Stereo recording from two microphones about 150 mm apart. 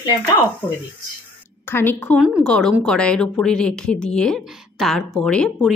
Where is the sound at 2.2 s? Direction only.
Centre (ahead or behind).